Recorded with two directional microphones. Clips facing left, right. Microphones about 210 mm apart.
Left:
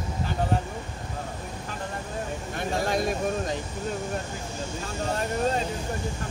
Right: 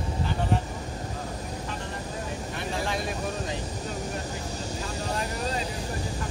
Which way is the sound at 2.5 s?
45° left (ahead or behind).